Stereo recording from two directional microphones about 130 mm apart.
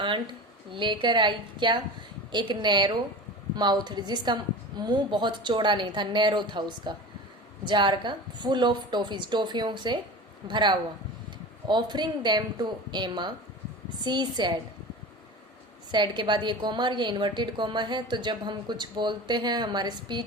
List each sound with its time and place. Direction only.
0.0 s a woman's voice: 40° right (ahead or behind)
15.9 s a woman's voice: 35° right (ahead or behind)